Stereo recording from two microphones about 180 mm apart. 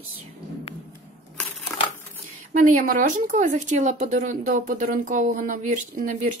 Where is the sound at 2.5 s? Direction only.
50° right (ahead or behind).